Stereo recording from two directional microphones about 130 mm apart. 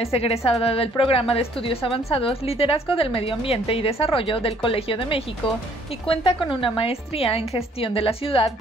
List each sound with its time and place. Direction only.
0.0 s a woman's voice: 50° left (ahead or behind)